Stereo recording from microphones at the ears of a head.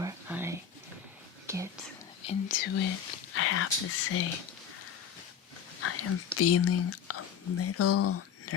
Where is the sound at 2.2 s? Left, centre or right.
Left.